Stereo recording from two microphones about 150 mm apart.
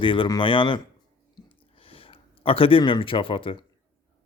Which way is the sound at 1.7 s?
40° left (ahead or behind).